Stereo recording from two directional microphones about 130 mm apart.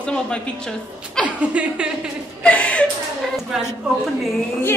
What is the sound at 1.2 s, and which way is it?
Speech, 10° right (ahead or behind).